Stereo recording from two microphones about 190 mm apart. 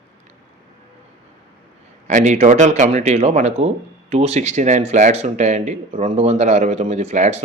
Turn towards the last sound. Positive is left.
turn(degrees=-35)  # may be behind; listen again after turning